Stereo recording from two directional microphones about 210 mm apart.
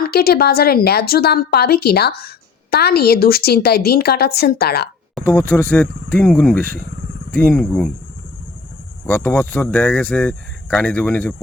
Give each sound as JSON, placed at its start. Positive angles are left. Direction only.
{"t": 0.1, "sound": "a woman's voice", "side_deg": 50}
{"t": 5.1, "sound": "speech", "side_deg": 10}
{"t": 9.0, "sound": "speech", "side_deg": 10}